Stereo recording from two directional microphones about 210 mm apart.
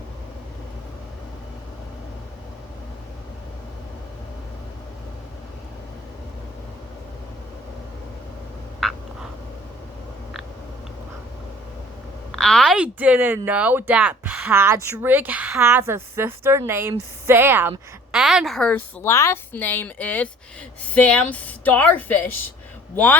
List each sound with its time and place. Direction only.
12.3 s a woman's voice: centre (ahead or behind)